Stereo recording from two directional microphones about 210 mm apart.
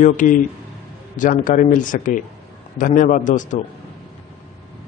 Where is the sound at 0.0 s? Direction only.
35° left (ahead or behind).